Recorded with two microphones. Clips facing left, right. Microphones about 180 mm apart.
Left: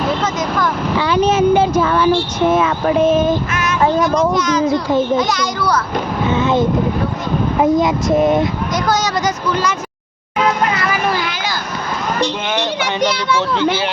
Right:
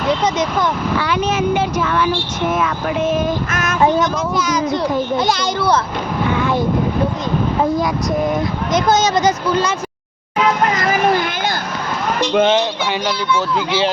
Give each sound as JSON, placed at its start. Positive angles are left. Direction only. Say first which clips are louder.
{"t": 0.2, "sound": "vehicle", "louder": "right 1 dB", "side_deg": -20}
{"t": 0.9, "sound": "a sound", "louder": "left 7 dB", "side_deg": 30}
{"t": 2.5, "sound": "speech", "louder": "left 4 dB", "side_deg": 30}
{"t": 3.5, "sound": "child singing", "louder": "left 1 dB", "side_deg": -45}
{"t": 4.4, "sound": "a child's voice", "louder": "left 2 dB", "side_deg": -10}
{"t": 5.2, "sound": "speech", "louder": "right 1 dB", "side_deg": -30}
{"t": 6.3, "sound": "speech", "louder": "left 4 dB", "side_deg": 25}
{"t": 8.7, "sound": "speech", "louder": "right 6 dB", "side_deg": -20}
{"t": 10.8, "sound": "a sound", "louder": "right 3 dB", "side_deg": -45}
{"t": 12.8, "sound": "a child's voice", "louder": "left 2 dB", "side_deg": 75}